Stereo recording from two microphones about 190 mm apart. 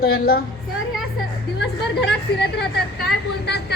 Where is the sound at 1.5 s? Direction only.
60° left (ahead or behind).